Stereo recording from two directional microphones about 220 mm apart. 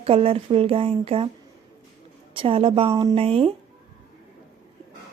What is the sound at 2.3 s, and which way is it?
A woman's voice, 25° right (ahead or behind).